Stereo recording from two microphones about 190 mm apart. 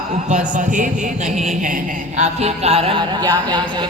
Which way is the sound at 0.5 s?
45° right (ahead or behind).